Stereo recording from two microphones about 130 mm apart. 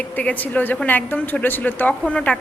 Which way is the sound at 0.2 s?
10° left (ahead or behind).